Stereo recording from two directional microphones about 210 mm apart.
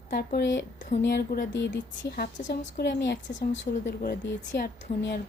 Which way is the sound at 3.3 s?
35° left (ahead or behind).